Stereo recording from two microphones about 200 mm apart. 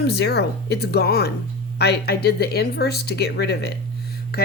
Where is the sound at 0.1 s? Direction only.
55° left (ahead or behind).